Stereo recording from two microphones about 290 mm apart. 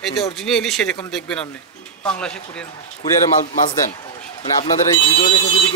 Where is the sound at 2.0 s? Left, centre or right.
Centre.